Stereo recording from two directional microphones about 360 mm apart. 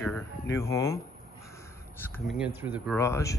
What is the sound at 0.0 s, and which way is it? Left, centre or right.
Speech, centre.